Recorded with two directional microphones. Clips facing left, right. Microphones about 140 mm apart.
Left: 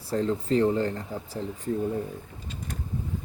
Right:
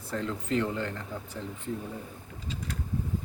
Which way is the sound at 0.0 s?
35° left (ahead or behind).